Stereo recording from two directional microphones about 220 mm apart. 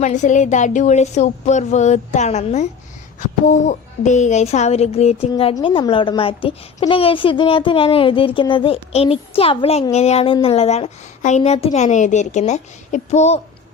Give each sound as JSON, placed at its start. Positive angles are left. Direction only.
{"t": 0.0, "sound": "speech", "side_deg": 35}